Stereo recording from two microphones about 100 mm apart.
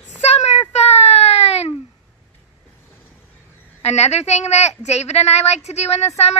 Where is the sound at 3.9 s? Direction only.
90° left.